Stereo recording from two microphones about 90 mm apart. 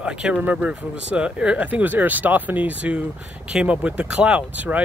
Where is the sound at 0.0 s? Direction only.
10° right (ahead or behind).